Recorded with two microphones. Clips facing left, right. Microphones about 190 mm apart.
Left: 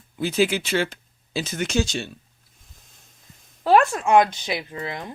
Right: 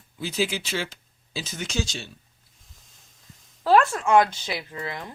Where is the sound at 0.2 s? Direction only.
55° left (ahead or behind).